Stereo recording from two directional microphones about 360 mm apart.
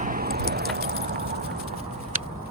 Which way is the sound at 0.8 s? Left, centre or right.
Right.